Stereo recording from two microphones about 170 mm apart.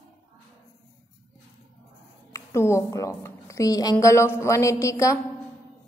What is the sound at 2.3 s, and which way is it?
A woman's voice, 15° left (ahead or behind).